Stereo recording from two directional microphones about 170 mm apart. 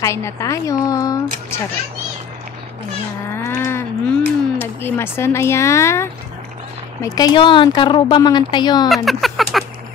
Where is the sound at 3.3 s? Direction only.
15° left (ahead or behind).